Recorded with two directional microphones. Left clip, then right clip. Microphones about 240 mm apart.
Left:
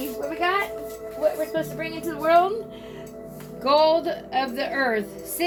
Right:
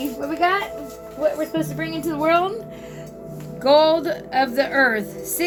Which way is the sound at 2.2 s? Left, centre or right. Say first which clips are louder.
Even; right.